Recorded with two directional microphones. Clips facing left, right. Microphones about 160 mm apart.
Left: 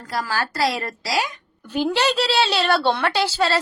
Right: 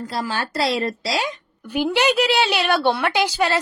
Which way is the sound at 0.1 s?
25° right (ahead or behind).